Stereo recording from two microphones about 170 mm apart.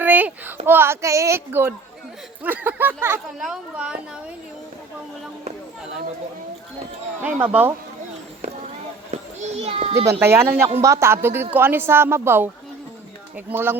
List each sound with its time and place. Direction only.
0.0 s a sound: 10° right (ahead or behind)
0.6 s a woman's voice: 15° right (ahead or behind)
7.2 s speech: 10° right (ahead or behind)
9.0 s a child's voice: 35° right (ahead or behind)
10.1 s speech: 15° right (ahead or behind)
13.5 s speech: 15° right (ahead or behind)